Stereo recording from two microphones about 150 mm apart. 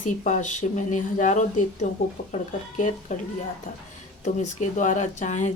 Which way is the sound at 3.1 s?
55° left (ahead or behind).